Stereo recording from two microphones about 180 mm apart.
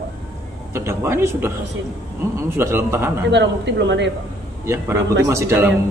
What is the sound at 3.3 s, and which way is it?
Speech, 75° right (ahead or behind).